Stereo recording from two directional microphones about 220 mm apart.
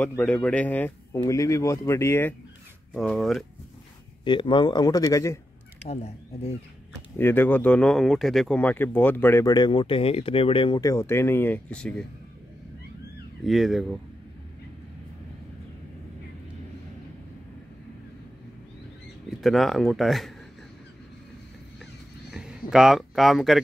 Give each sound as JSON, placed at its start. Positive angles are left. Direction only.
{"t": 0.2, "sound": "speech", "side_deg": 5}
{"t": 4.2, "sound": "a man's voice", "side_deg": 20}
{"t": 5.9, "sound": "a man's voice", "side_deg": 30}
{"t": 7.2, "sound": "speech", "side_deg": 10}
{"t": 13.4, "sound": "speech", "side_deg": 0}
{"t": 19.4, "sound": "speech", "side_deg": 0}
{"t": 22.3, "sound": "speech", "side_deg": -5}